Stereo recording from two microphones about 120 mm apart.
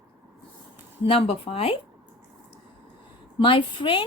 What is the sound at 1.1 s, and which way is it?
Speech, 55° left (ahead or behind).